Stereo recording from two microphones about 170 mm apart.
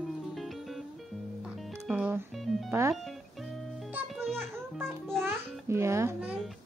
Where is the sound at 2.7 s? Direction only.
15° right (ahead or behind).